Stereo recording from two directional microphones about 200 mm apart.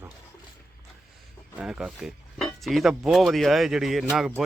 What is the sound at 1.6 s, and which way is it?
Speech, 5° right (ahead or behind).